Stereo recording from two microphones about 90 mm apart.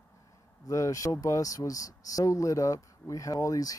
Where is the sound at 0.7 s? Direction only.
35° left (ahead or behind).